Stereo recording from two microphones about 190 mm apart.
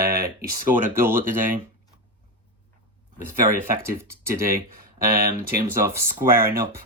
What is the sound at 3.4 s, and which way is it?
Mantra, 20° right (ahead or behind).